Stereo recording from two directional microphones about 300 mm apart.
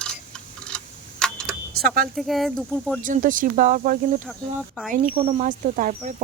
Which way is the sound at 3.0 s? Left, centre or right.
Right.